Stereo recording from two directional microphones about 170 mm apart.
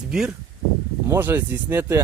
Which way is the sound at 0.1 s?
5° right (ahead or behind).